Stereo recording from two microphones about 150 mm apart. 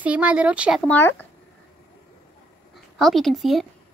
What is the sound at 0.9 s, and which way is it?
Speech, 15° left (ahead or behind).